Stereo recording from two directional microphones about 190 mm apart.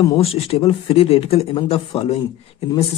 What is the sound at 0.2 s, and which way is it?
Speech, 30° left (ahead or behind).